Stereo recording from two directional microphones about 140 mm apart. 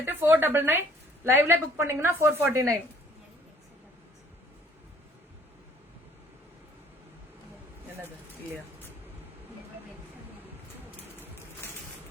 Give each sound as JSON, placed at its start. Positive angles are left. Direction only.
{"t": 0.0, "sound": "a woman's voice", "side_deg": -15}